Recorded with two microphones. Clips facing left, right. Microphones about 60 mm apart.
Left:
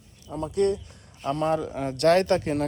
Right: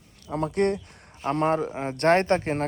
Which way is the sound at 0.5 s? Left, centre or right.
Right.